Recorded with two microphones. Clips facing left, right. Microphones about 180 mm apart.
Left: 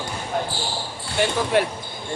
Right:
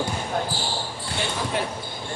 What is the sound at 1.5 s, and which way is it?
Speech, 75° left (ahead or behind).